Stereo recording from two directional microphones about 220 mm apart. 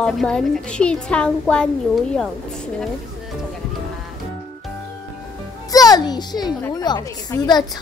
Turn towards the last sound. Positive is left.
turn(degrees=20)  # may be behind; listen again after turning